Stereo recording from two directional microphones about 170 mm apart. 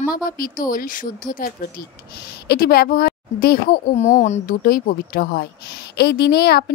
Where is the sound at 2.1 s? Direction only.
70° left (ahead or behind).